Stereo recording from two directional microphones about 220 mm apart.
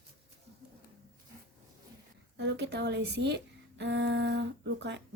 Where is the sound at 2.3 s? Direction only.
50° right (ahead or behind).